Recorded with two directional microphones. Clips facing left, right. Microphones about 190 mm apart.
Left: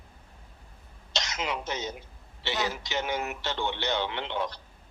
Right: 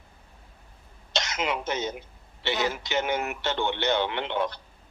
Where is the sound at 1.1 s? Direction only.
55° right (ahead or behind).